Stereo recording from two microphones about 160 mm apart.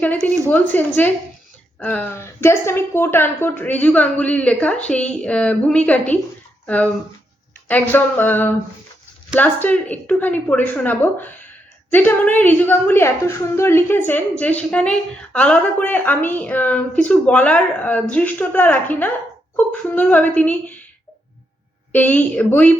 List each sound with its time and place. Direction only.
0.0 s a woman's voice: 10° left (ahead or behind)
21.9 s a woman's voice: 10° left (ahead or behind)